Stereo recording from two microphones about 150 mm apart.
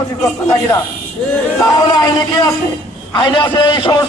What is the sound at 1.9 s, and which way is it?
A man's voice, 25° left (ahead or behind).